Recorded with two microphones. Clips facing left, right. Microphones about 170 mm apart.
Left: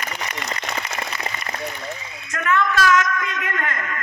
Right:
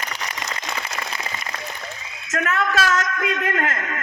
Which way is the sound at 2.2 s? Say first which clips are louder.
Left 2 dB; 40° right (ahead or behind).